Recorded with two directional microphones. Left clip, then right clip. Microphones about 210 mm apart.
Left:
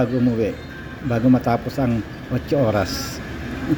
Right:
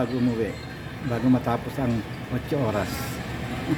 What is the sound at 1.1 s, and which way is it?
Speech, 10° left (ahead or behind).